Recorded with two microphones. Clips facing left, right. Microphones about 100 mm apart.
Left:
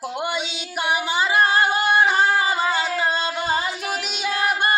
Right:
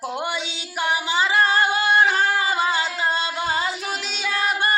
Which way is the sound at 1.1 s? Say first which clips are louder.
Even; 15° left (ahead or behind).